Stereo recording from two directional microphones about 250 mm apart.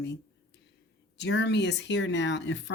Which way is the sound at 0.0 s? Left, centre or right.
Left.